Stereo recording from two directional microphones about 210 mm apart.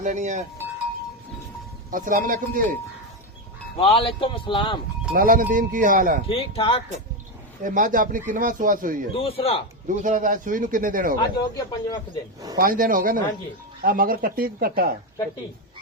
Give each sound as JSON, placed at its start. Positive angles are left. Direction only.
{"t": 0.0, "sound": "speech", "side_deg": -35}
{"t": 1.9, "sound": "speech", "side_deg": -40}
{"t": 3.8, "sound": "speech", "side_deg": 25}
{"t": 5.1, "sound": "speech", "side_deg": -45}
{"t": 6.2, "sound": "speech", "side_deg": 25}
{"t": 7.6, "sound": "speech", "side_deg": -40}
{"t": 9.1, "sound": "speech", "side_deg": 25}
{"t": 9.8, "sound": "speech", "side_deg": -35}
{"t": 11.2, "sound": "speech", "side_deg": 20}
{"t": 12.5, "sound": "speech", "side_deg": -40}